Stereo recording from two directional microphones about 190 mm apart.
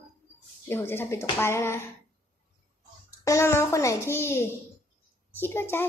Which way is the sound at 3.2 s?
15° left (ahead or behind).